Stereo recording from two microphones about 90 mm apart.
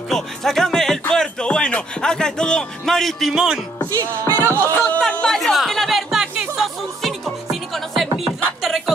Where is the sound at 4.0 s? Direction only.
20° left (ahead or behind).